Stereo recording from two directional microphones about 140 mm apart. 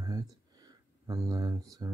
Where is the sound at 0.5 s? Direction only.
25° right (ahead or behind).